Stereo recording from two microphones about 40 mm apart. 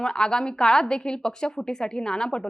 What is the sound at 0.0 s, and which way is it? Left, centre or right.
Speech, centre.